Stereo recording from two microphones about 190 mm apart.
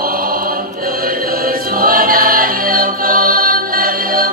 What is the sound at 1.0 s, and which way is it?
Choir, 50° right (ahead or behind).